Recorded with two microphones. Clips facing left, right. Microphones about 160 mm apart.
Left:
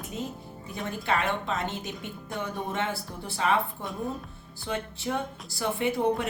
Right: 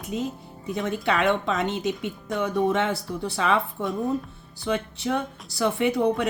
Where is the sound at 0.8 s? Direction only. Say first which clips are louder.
Right 4 dB; 70° right (ahead or behind).